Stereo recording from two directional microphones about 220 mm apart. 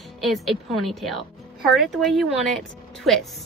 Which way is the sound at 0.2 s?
Centre (ahead or behind).